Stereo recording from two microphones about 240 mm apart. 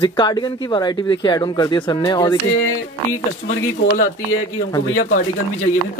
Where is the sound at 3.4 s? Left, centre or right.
Left.